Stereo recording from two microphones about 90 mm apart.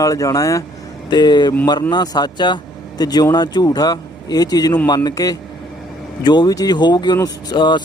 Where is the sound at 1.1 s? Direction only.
55° left (ahead or behind).